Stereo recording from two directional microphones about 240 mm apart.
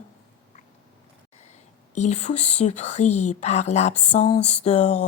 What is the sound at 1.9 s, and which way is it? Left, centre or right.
Speech, left.